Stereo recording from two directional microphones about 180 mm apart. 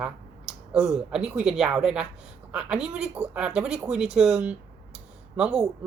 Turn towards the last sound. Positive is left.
turn(degrees=0)  # may be behind; listen again after turning